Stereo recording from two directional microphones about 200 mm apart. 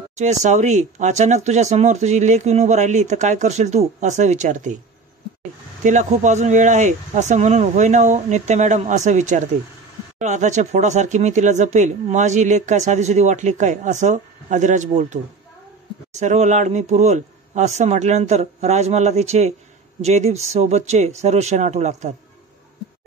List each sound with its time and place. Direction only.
0.1 s speech: 35° right (ahead or behind)
5.9 s speech: 35° right (ahead or behind)
16.2 s speech: 35° right (ahead or behind)